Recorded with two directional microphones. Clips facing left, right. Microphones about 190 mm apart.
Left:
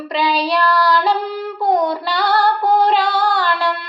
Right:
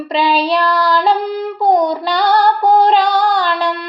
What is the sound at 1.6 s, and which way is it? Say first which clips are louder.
Female singing: right 3 dB; 20° right (ahead or behind).